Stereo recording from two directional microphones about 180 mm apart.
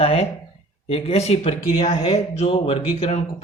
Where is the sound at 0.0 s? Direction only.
35° left (ahead or behind).